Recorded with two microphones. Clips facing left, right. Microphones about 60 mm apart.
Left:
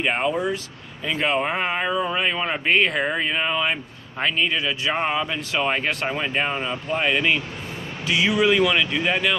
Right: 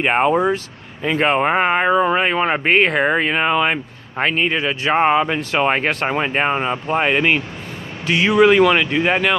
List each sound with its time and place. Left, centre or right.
0.0 s speech: right
4.2 s speech: right